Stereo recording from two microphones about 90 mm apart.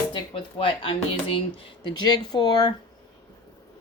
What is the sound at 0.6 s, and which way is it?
Speech, 75° left (ahead or behind).